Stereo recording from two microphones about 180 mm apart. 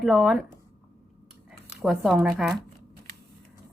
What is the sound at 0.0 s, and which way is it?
Speech, centre (ahead or behind).